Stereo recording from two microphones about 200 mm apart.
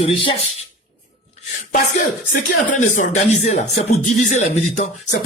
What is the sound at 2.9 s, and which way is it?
Speech, 35° left (ahead or behind).